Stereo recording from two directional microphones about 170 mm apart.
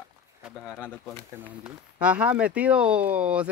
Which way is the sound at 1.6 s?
5° right (ahead or behind).